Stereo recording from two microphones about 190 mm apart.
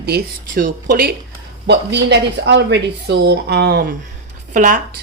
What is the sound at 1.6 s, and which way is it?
Speech, 65° right (ahead or behind).